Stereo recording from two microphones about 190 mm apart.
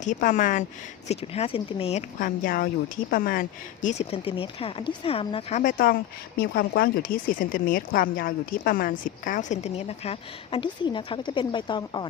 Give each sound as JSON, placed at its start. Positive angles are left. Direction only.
{"t": 0.0, "sound": "speech", "side_deg": 40}